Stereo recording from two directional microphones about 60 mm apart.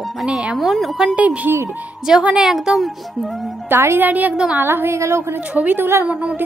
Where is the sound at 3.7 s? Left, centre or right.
Right.